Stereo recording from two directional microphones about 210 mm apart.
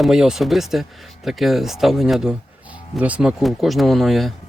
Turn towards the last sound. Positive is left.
turn(degrees=0)  # may be behind; listen again after turning